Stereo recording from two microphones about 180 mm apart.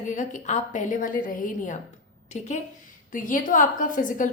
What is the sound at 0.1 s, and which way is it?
A woman's voice, 45° left (ahead or behind).